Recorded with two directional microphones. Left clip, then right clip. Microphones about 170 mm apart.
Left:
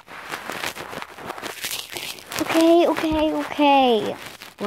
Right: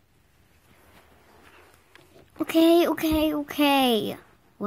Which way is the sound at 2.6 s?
45° right (ahead or behind).